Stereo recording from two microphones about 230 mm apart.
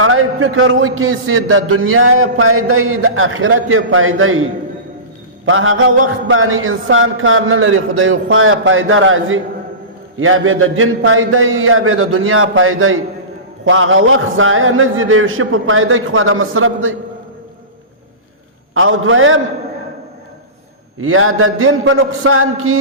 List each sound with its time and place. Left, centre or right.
0.0 s a man's voice: right
5.5 s a man's voice: right
18.7 s a man's voice: right
21.0 s a man's voice: right